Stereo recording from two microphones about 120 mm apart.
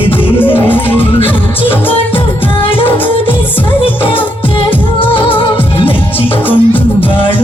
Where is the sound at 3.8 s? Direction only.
50° left (ahead or behind).